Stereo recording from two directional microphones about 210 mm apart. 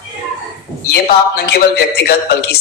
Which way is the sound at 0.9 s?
50° left (ahead or behind).